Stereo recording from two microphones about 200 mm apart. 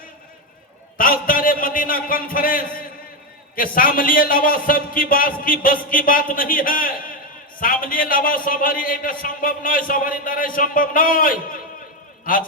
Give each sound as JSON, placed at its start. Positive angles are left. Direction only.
{"t": 0.9, "sound": "a man's voice", "side_deg": 45}